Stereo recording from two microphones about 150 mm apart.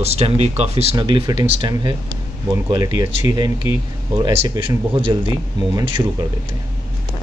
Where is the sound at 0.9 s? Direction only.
30° right (ahead or behind).